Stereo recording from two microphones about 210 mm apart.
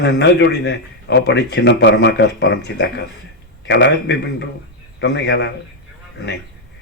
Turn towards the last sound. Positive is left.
turn(degrees=55)  # may be behind; listen again after turning